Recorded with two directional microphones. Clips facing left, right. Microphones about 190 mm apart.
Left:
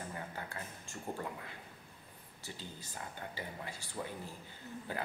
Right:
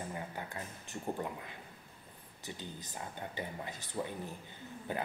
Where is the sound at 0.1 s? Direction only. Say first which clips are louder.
Right 2 dB; 20° right (ahead or behind).